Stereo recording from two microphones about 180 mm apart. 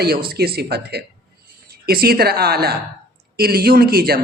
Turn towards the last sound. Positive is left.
turn(degrees=-55)  # may be behind; listen again after turning